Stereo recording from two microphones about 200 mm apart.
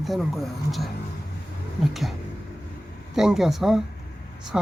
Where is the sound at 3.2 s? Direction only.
Centre (ahead or behind).